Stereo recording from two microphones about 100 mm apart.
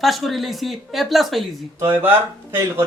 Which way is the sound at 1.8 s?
25° right (ahead or behind).